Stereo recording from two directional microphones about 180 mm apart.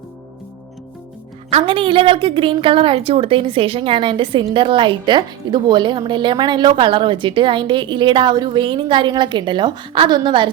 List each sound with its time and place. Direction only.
1.5 s a woman's voice: 30° right (ahead or behind)